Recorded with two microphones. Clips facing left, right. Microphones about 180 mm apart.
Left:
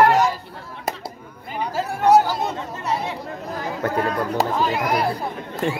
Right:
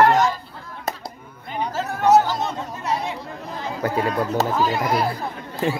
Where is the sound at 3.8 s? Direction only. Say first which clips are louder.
Right 1 dB; 5° right (ahead or behind).